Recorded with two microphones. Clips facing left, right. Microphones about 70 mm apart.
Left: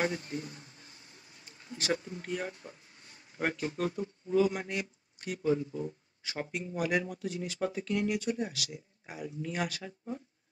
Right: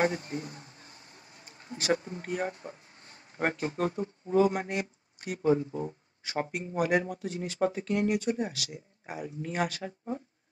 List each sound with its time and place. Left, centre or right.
0.0 s speech: right